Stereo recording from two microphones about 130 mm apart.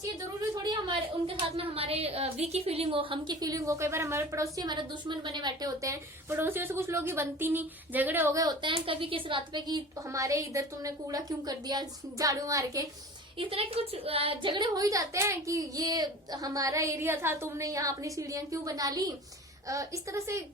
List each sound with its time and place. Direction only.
1.5 s a woman's voice: 50° right (ahead or behind); by 8.4 s 15° right (ahead or behind)
8.4 s a woman's voice: 30° right (ahead or behind)
8.7 s a woman's voice: 45° right (ahead or behind); by 12.9 s 25° right (ahead or behind)
13.4 s a woman's voice: 45° right (ahead or behind); by 20.4 s 25° right (ahead or behind)